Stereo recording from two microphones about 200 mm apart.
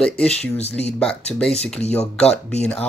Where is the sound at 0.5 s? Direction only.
30° left (ahead or behind).